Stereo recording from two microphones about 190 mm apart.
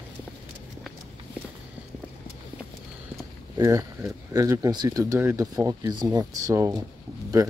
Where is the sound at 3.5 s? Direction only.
15° right (ahead or behind).